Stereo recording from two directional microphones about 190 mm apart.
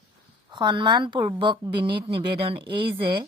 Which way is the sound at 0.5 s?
25° right (ahead or behind).